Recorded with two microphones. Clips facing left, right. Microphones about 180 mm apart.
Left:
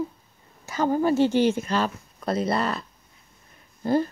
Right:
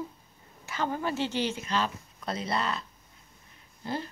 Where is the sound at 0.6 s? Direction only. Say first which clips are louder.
Left 9 dB; 40° left (ahead or behind).